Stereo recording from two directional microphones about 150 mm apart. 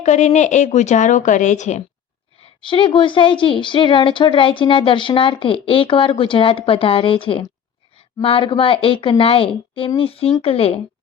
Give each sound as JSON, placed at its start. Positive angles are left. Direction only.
{"t": 0.0, "sound": "speech", "side_deg": 50}
{"t": 2.4, "sound": "a woman's voice", "side_deg": 35}